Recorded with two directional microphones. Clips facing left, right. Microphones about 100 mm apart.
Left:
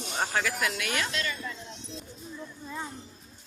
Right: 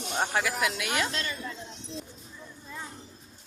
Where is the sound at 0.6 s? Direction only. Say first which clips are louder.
Right 2 dB; 20° right (ahead or behind).